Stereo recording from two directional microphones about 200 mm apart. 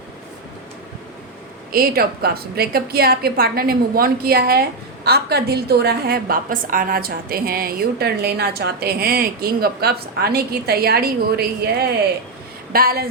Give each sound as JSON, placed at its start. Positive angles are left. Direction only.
{"t": 1.7, "sound": "a woman's voice", "side_deg": -50}